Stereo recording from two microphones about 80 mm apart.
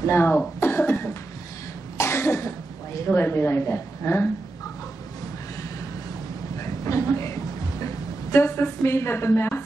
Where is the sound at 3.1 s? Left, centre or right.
Left.